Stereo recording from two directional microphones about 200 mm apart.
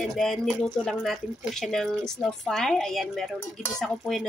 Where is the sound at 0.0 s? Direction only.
Centre (ahead or behind).